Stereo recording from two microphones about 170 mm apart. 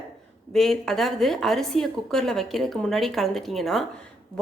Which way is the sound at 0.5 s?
Centre (ahead or behind).